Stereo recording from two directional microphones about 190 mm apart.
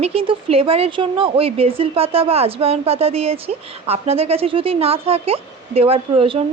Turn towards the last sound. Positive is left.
turn(degrees=-30)  # may be behind; listen again after turning